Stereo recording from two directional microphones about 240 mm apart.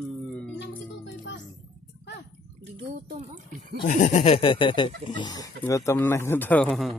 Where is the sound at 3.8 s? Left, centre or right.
Left; by 7.0 s centre.